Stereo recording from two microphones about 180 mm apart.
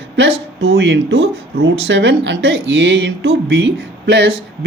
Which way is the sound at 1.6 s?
70° right (ahead or behind).